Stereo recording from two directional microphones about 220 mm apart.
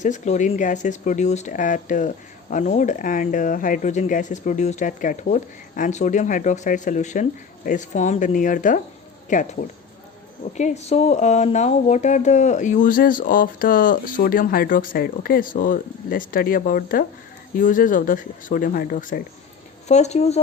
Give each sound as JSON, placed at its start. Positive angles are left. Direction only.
{"t": 0.0, "sound": "speech", "side_deg": 35}